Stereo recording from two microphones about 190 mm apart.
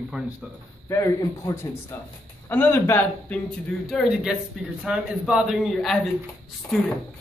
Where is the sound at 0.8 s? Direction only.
15° left (ahead or behind).